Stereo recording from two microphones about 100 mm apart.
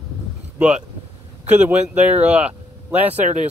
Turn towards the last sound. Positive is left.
turn(degrees=-15)  # may be behind; listen again after turning